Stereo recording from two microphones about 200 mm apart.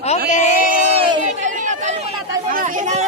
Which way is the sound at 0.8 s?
30° right (ahead or behind).